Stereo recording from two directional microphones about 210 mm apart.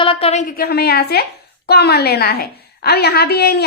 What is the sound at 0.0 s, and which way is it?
A woman's voice, 25° left (ahead or behind).